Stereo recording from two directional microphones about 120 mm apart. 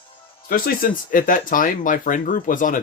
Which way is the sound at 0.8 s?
90° left.